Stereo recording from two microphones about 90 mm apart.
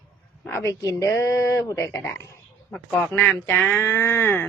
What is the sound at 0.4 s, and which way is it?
Speech, 30° left (ahead or behind).